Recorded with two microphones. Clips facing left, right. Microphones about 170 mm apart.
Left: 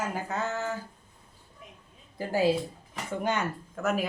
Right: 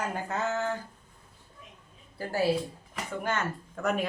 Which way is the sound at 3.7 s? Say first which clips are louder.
Even; centre (ahead or behind).